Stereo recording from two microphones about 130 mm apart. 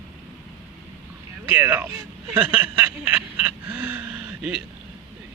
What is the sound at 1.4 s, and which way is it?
Speech, 15° right (ahead or behind).